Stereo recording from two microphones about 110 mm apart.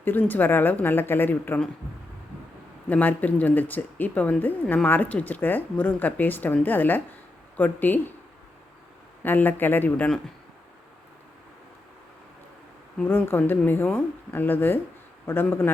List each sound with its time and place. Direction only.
0.0 s speech: 15° left (ahead or behind)
2.9 s speech: 15° left (ahead or behind)
9.2 s speech: 15° left (ahead or behind)
13.1 s a man's voice: 20° left (ahead or behind)